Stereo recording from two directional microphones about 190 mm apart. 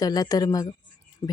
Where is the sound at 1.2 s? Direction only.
30° left (ahead or behind).